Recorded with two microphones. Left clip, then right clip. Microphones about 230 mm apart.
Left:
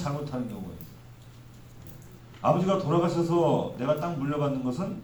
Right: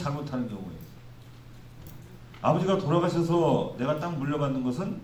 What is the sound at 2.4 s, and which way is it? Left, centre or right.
A man's voice, right.